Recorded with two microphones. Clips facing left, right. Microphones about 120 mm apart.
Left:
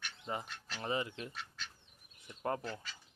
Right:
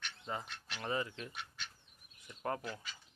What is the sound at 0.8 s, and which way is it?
Speech, 25° left (ahead or behind).